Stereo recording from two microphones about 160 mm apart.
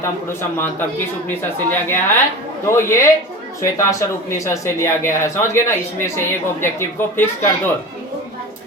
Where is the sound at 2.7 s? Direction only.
15° left (ahead or behind).